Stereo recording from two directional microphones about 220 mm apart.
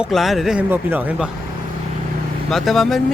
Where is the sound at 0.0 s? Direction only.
Centre (ahead or behind).